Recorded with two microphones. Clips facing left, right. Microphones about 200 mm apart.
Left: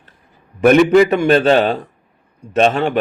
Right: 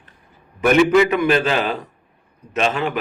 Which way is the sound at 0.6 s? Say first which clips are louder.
Left 4 dB; 35° left (ahead or behind).